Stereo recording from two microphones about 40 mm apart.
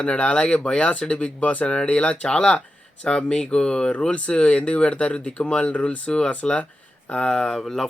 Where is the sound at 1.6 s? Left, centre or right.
Left.